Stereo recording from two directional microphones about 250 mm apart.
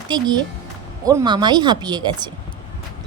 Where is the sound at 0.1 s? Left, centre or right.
Centre.